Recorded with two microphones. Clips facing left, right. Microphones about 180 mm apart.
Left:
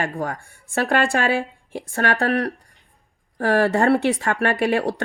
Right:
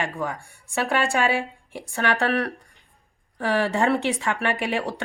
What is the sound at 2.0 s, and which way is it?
Speech, 40° left (ahead or behind).